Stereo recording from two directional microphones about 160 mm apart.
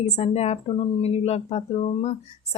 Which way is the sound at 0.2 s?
40° left (ahead or behind).